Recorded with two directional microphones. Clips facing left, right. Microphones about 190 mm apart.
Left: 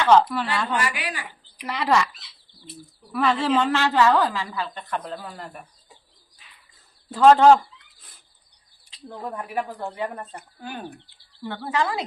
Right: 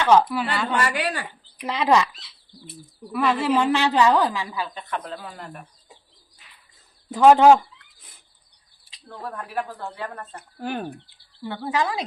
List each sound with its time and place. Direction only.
0.0 s a woman's voice: 10° right (ahead or behind)
1.6 s speech: 20° right (ahead or behind)
3.1 s speech: centre (ahead or behind)
3.5 s a woman's voice: 15° right (ahead or behind)
7.1 s a woman's voice: 15° right (ahead or behind)
8.8 s speech: 15° left (ahead or behind)
10.6 s speech: 65° right (ahead or behind)
11.4 s a woman's voice: 15° right (ahead or behind)